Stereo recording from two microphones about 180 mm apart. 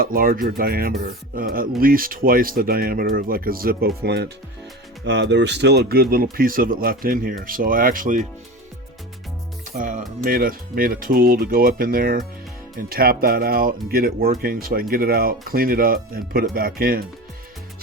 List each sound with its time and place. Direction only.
0.0 s speech: 55° right (ahead or behind)
9.7 s speech: 45° right (ahead or behind)